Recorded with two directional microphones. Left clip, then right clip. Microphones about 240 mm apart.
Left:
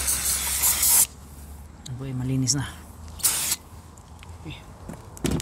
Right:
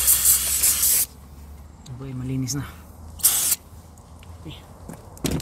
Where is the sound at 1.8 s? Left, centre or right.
Left.